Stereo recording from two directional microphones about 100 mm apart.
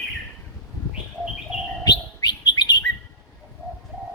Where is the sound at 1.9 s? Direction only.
40° left (ahead or behind).